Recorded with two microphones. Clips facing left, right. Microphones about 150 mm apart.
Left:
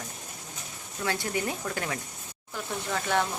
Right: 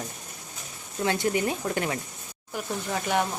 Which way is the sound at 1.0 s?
20° right (ahead or behind).